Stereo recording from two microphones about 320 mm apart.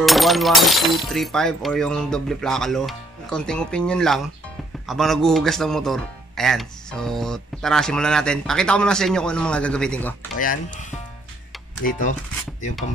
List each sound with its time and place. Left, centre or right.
0.0 s speech: centre
10.4 s speech: left